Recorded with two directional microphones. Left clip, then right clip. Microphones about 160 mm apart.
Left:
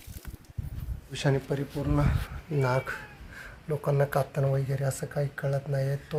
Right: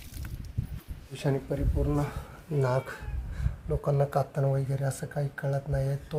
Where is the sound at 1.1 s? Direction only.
25° left (ahead or behind).